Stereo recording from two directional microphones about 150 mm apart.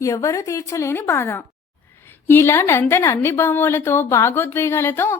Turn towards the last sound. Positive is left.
turn(degrees=15)  # may be behind; listen again after turning